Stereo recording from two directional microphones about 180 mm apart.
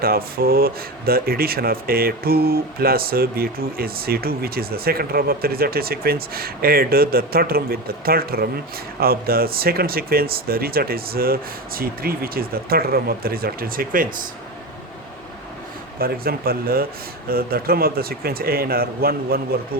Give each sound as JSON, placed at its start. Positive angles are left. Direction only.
{"t": 0.0, "sound": "speech", "side_deg": -55}
{"t": 16.0, "sound": "speech", "side_deg": -55}